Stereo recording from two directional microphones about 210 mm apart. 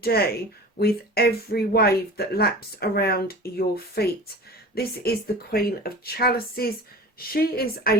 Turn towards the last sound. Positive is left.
turn(degrees=45)  # may be behind; listen again after turning